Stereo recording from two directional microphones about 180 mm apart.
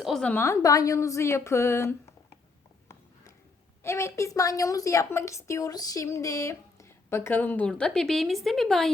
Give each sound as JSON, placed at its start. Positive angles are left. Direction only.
{"t": 0.0, "sound": "a woman's voice", "side_deg": 0}
{"t": 3.8, "sound": "a woman's voice", "side_deg": 15}